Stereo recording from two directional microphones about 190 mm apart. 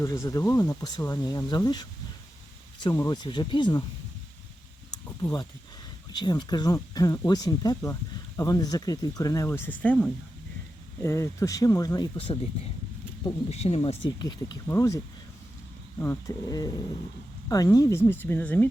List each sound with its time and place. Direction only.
0.0 s speech: 15° left (ahead or behind)
6.1 s speech: 20° left (ahead or behind)
13.5 s speech: 30° left (ahead or behind); by 18.7 s 10° left (ahead or behind)